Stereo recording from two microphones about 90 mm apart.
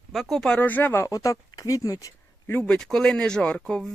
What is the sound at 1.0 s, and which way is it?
Speech, 40° left (ahead or behind).